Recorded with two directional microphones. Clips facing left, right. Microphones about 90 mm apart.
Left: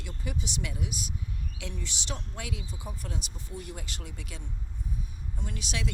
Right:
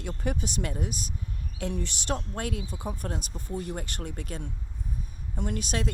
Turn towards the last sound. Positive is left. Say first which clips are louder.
# right 6 dB
turn(degrees=-45)  # may be behind; listen again after turning